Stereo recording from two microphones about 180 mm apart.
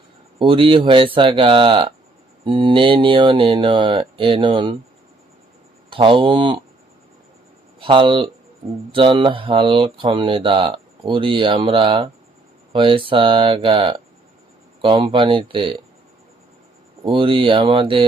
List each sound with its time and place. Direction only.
0.3 s speech: 30° right (ahead or behind)
5.9 s speech: 30° right (ahead or behind)
7.8 s speech: 30° right (ahead or behind)
17.0 s speech: 30° right (ahead or behind)